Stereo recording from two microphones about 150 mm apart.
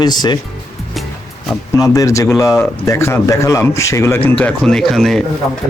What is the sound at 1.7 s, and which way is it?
A man's voice, 20° left (ahead or behind).